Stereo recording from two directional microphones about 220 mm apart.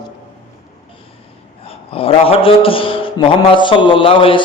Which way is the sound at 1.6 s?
25° left (ahead or behind).